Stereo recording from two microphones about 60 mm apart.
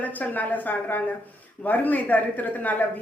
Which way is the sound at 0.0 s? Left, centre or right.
Left.